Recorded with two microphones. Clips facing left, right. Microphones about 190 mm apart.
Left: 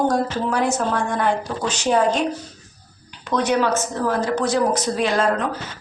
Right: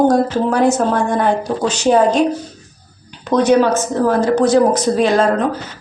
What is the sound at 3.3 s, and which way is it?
A woman's voice, 40° right (ahead or behind).